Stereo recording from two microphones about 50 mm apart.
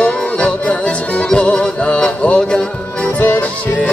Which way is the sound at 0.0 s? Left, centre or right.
Left.